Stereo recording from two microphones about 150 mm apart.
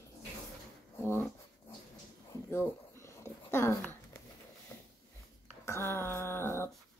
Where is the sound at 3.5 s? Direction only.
15° left (ahead or behind).